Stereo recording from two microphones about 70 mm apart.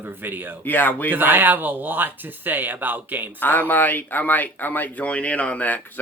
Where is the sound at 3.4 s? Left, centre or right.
Left.